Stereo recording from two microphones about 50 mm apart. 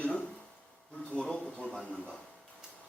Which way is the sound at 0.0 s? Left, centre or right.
Centre.